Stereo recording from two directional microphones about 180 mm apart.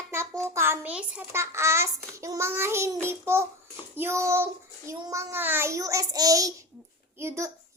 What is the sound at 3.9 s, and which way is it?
Child singing, 15° right (ahead or behind).